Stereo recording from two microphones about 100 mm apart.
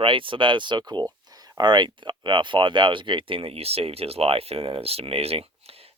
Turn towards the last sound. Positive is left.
turn(degrees=-80)